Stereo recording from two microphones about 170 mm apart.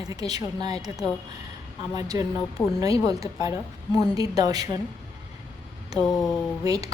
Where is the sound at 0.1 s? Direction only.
25° right (ahead or behind).